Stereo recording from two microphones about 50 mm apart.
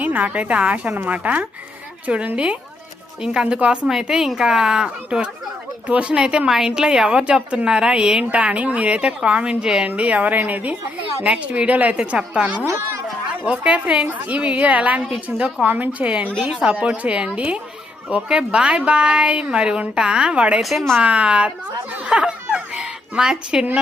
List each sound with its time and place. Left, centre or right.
0.0 s a woman's voice: right; by 9.8 s centre
9.8 s a woman's voice: right
15.6 s a woman's voice: right
20.6 s speech: centre
21.0 s a woman's voice: right
22.0 s snicker: right